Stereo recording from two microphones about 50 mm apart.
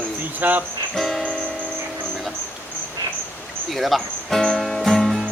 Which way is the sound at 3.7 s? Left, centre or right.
Centre.